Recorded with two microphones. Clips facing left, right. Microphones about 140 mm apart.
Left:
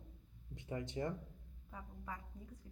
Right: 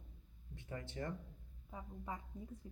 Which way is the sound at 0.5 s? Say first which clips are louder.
Left 4 dB; 20° left (ahead or behind).